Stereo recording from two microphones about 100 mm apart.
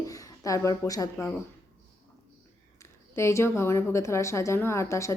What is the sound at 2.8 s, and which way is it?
A woman's voice, 30° left (ahead or behind).